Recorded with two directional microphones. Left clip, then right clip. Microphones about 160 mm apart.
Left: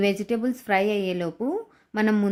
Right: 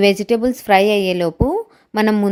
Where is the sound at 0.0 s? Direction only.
30° right (ahead or behind).